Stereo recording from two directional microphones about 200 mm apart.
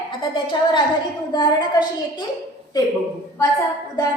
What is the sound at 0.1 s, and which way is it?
A woman's voice, 25° left (ahead or behind).